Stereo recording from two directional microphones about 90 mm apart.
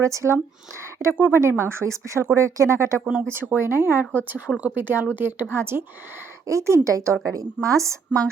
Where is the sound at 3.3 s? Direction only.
25° right (ahead or behind).